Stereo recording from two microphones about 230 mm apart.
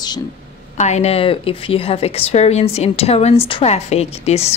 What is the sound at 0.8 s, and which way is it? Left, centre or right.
A woman's voice, left.